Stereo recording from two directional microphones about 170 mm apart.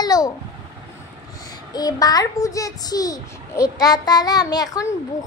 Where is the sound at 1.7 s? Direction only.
25° left (ahead or behind).